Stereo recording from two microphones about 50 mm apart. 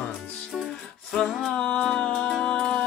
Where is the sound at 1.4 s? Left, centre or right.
Centre.